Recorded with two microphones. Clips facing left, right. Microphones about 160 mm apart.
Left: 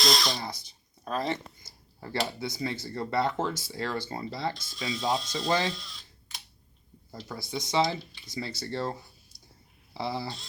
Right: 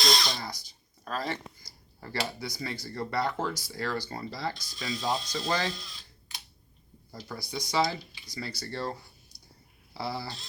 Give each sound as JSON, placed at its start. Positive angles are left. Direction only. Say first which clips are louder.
{"t": 0.0, "sound": "speech", "louder": "left 1 dB", "side_deg": 0}
{"t": 0.4, "sound": "speech", "louder": "left 2 dB", "side_deg": 20}
{"t": 2.4, "sound": "speech", "louder": "left 4 dB", "side_deg": 20}
{"t": 4.5, "sound": "speech", "louder": "left 1 dB", "side_deg": 0}
{"t": 5.6, "sound": "a sound", "louder": "left 2 dB", "side_deg": 0}
{"t": 7.3, "sound": "speech", "louder": "left 2 dB", "side_deg": 20}
{"t": 9.3, "sound": "a sound", "louder": "even", "side_deg": 20}
{"t": 9.9, "sound": "speech", "louder": "left 2 dB", "side_deg": 20}